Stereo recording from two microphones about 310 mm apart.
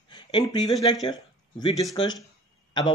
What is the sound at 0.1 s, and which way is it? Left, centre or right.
Speech, centre.